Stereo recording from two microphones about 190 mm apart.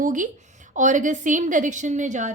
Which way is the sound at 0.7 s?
40° right (ahead or behind).